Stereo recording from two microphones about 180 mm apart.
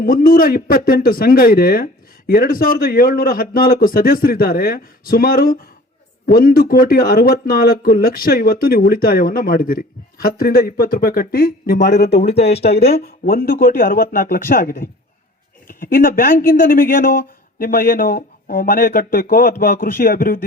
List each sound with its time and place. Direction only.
0.0 s speech: 50° left (ahead or behind)
12.2 s speech: 35° left (ahead or behind)
12.6 s speech: 65° left (ahead or behind)